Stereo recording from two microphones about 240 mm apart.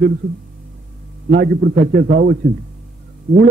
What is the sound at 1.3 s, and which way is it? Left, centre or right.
Speech, right.